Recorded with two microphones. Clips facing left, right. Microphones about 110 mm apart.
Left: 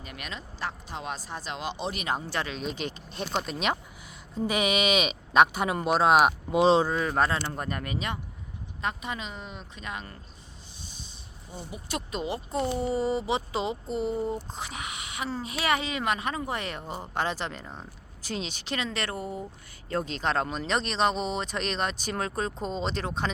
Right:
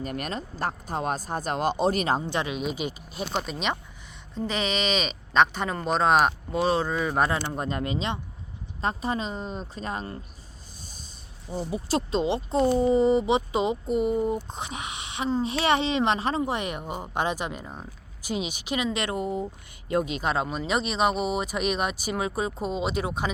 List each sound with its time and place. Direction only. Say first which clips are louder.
0.0 s speech: right 9 dB; 45° right (ahead or behind)
2.2 s speech: right 4 dB; 20° right (ahead or behind); by 6.3 s 5° left (ahead or behind)
6.5 s speech: left 3 dB; 20° left (ahead or behind)
6.8 s speech: right 1 dB; centre (ahead or behind)
7.3 s speech: right 2 dB; 20° right (ahead or behind)
8.8 s speech: right 5 dB; 35° right (ahead or behind)
11.7 s speech: right 8 dB; 30° right (ahead or behind); by 23.3 s 10° right (ahead or behind)